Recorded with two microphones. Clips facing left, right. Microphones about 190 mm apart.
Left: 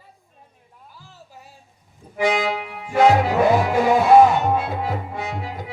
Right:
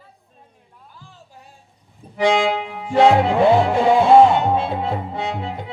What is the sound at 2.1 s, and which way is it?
Music, 30° right (ahead or behind).